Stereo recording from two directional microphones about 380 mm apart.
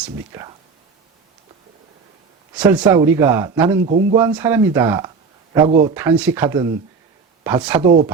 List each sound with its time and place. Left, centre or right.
0.0 s speech: centre
2.6 s speech: centre
3.8 s speech: right
4.1 s speech: centre
5.9 s speech: centre